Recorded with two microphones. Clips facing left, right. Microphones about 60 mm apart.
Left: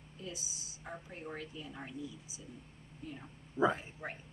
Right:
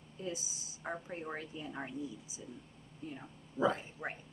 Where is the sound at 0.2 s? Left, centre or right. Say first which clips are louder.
Right 4 dB; right.